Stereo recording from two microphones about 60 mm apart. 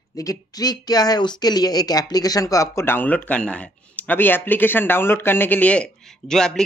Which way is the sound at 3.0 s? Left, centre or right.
Left.